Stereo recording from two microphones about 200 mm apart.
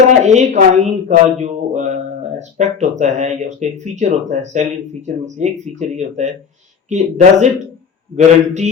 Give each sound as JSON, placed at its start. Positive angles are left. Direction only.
{"t": 0.3, "sound": "speech", "side_deg": -35}